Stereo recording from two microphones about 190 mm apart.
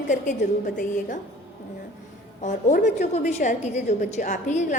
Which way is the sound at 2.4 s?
40° left (ahead or behind).